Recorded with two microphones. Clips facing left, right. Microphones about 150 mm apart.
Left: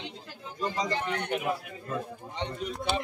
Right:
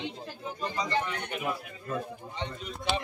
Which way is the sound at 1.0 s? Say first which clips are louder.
Left 5 dB; 70° left (ahead or behind).